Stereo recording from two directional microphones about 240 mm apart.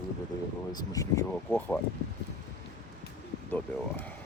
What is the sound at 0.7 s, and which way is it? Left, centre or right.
Speech, centre.